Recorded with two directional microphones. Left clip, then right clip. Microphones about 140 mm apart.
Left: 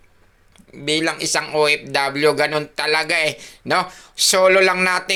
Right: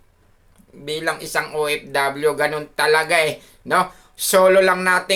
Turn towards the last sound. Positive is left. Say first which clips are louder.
# even
turn(degrees=30)  # may be behind; listen again after turning